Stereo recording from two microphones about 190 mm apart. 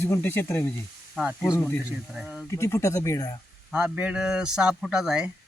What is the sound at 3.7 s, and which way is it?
Speech, 5° right (ahead or behind).